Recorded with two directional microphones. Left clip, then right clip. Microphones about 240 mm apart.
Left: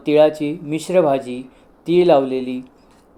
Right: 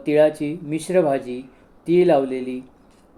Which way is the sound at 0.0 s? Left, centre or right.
Centre.